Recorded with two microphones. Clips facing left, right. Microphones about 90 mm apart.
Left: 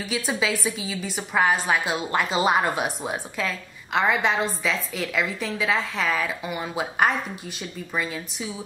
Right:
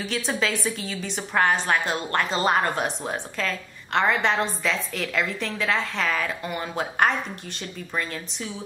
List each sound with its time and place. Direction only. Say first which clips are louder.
0.0 s a woman's voice: even; 5° left (ahead or behind)